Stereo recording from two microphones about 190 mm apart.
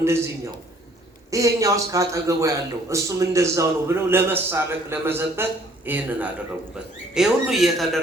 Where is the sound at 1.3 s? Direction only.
15° right (ahead or behind).